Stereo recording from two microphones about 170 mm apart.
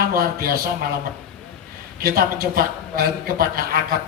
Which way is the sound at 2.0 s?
60° right (ahead or behind).